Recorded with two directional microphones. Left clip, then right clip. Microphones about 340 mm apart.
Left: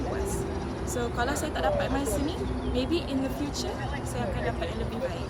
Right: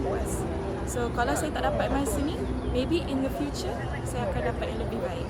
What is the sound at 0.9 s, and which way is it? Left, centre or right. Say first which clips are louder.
Speech: right 2 dB; centre.